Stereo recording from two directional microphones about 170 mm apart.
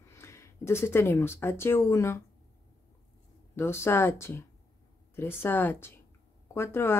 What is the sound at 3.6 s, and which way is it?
Speech, 15° left (ahead or behind).